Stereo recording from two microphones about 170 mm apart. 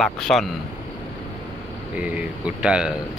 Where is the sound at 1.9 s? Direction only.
10° right (ahead or behind).